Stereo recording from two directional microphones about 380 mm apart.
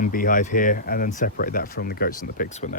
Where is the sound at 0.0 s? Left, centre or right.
Left.